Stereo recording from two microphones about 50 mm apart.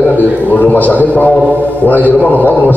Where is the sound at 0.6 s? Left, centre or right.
Left.